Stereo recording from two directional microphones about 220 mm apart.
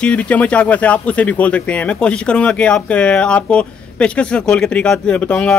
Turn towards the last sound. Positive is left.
turn(degrees=5)  # may be behind; listen again after turning